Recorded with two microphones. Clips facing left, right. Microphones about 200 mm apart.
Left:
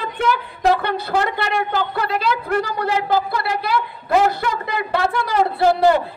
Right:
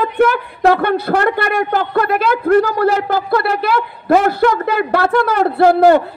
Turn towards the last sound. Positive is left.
turn(degrees=-60)  # may be behind; listen again after turning